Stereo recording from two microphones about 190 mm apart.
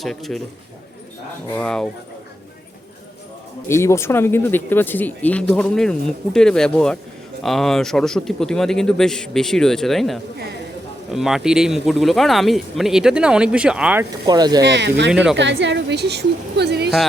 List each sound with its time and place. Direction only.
0.0 s speech: centre (ahead or behind)
1.5 s speech: 5° left (ahead or behind)
3.7 s speech: 15° left (ahead or behind); by 14.1 s 10° right (ahead or behind)
14.3 s speech: 20° right (ahead or behind)
14.6 s a woman's voice: 65° right (ahead or behind)
15.1 s speech: 5° right (ahead or behind)
15.4 s a woman's voice: 70° right (ahead or behind)